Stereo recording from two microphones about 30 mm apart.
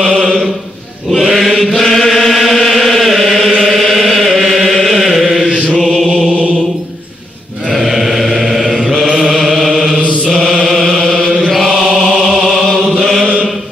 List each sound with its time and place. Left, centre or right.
1.1 s mantra: centre
1.8 s chant: centre
5.2 s chant: centre
5.8 s chant: centre
7.7 s mantra: centre
9.0 s chant: centre
13.2 s chant: left